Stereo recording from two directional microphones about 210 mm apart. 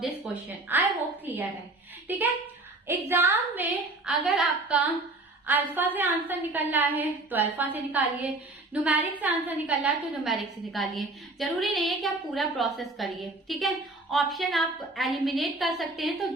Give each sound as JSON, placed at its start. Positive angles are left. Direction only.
{"t": 0.7, "sound": "a woman's voice", "side_deg": -10}